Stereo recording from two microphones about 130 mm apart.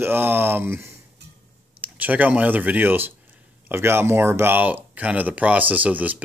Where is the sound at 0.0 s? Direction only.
15° right (ahead or behind).